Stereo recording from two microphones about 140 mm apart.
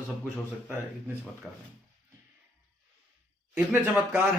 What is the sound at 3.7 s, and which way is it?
Speech, 10° right (ahead or behind).